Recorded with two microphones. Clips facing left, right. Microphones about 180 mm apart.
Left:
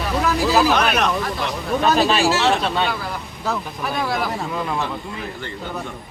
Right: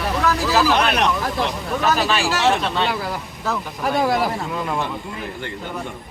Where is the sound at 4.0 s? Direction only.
40° right (ahead or behind).